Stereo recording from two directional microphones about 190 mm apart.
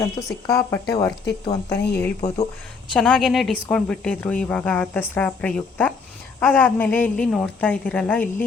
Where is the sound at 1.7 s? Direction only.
60° left (ahead or behind).